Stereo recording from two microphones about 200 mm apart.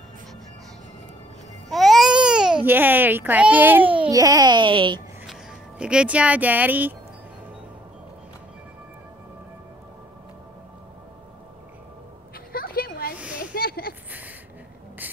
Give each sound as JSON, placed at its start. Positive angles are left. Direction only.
{"t": 1.7, "sound": "speech", "side_deg": 0}
{"t": 4.1, "sound": "a child's voice", "side_deg": -20}
{"t": 5.2, "sound": "speech", "side_deg": -5}
{"t": 12.5, "sound": "a sound", "side_deg": 45}